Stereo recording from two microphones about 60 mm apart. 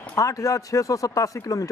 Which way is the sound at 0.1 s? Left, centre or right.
Left.